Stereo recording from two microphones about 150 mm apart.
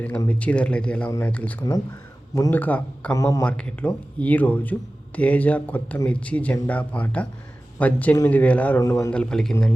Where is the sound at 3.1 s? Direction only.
20° left (ahead or behind).